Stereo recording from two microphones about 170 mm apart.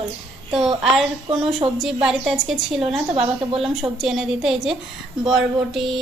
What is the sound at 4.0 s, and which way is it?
A woman's voice, centre (ahead or behind).